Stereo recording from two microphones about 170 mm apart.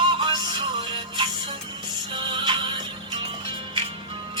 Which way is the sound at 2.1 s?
30° right (ahead or behind).